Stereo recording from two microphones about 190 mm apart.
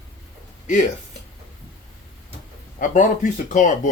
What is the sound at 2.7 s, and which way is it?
Speech, 40° left (ahead or behind).